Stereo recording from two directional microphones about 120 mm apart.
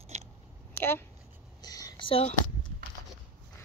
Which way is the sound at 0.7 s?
20° left (ahead or behind).